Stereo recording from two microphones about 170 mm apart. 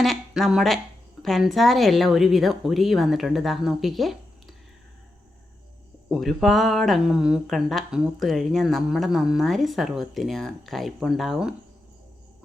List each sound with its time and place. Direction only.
0.0 s speech: centre (ahead or behind)
6.1 s speech: centre (ahead or behind)